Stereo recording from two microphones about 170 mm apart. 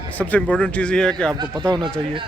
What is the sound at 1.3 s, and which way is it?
Speech, 25° right (ahead or behind).